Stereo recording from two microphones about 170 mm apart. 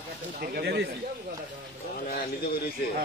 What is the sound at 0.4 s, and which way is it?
Speech, 75° right (ahead or behind).